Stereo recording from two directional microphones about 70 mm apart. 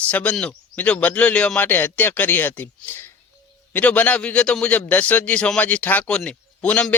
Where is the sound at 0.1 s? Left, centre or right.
Left.